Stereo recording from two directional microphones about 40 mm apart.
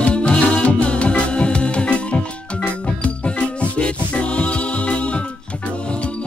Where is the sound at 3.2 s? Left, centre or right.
Left.